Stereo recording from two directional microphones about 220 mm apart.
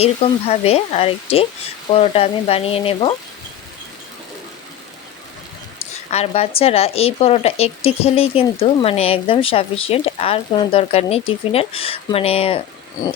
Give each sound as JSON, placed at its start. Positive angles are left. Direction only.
{"t": 0.0, "sound": "speech", "side_deg": 30}
{"t": 5.8, "sound": "speech", "side_deg": 30}